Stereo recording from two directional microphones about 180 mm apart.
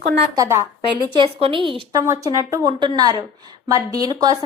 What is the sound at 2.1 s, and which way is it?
A woman's voice, 15° right (ahead or behind).